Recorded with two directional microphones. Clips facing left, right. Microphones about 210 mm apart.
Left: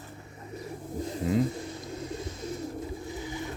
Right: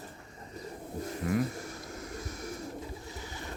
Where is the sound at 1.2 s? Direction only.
20° left (ahead or behind).